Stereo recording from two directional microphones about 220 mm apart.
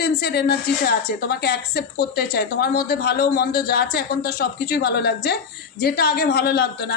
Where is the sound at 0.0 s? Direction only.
45° left (ahead or behind).